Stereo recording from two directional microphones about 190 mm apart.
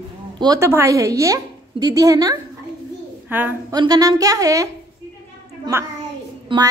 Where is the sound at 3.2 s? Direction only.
10° right (ahead or behind).